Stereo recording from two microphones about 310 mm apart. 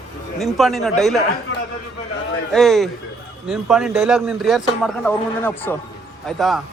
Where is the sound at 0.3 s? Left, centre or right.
Centre.